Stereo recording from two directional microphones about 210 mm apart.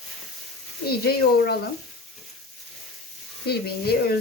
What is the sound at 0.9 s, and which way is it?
Speech, 50° left (ahead or behind).